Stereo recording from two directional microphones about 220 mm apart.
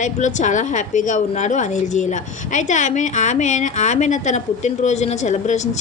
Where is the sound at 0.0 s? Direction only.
35° left (ahead or behind).